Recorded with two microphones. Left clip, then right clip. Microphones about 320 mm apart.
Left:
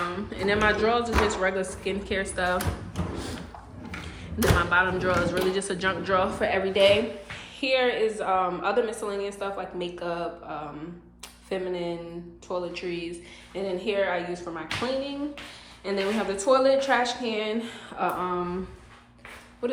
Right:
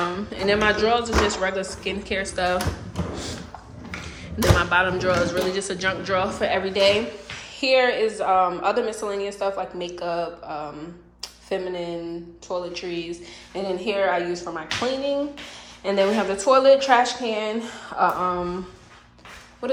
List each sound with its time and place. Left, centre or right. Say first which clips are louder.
0.3 s a woman's voice: right 3 dB; centre
4.5 s a woman's voice: right 2 dB; centre
15.8 s a woman's voice: right 7 dB; centre
19.6 s a sound: right 3 dB; centre